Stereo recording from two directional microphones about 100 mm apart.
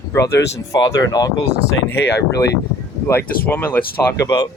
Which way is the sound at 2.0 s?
25° left (ahead or behind).